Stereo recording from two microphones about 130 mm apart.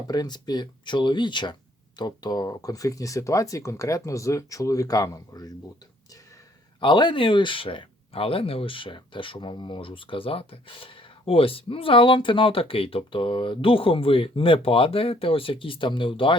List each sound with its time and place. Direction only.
0.1 s speech: 30° left (ahead or behind)
6.7 s speech: 35° left (ahead or behind)